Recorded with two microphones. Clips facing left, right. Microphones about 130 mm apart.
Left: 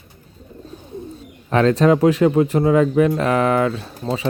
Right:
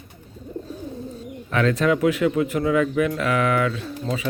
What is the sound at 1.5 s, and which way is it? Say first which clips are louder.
Speech: left 5 dB; 35° left (ahead or behind).